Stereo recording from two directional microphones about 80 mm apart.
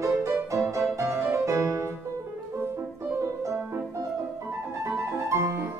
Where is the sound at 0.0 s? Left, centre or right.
Right.